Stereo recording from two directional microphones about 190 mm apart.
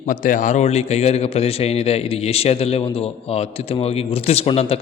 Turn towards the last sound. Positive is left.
turn(degrees=30)  # may be behind; listen again after turning